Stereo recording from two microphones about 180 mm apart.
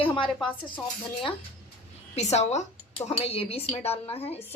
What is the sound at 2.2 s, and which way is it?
Speech, 40° left (ahead or behind).